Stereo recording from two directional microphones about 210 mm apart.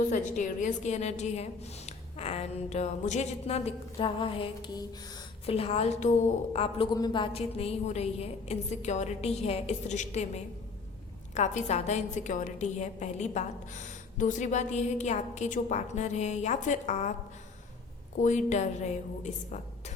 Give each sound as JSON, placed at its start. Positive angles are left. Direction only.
{"t": 0.1, "sound": "a woman's voice", "side_deg": 40}
{"t": 18.2, "sound": "a woman's voice", "side_deg": 35}